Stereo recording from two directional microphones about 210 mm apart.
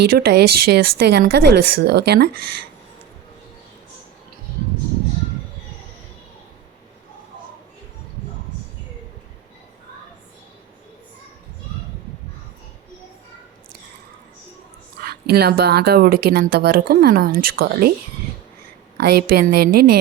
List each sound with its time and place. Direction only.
0.0 s speech: 50° right (ahead or behind)
15.0 s speech: 50° right (ahead or behind)
18.9 s speech: 50° right (ahead or behind)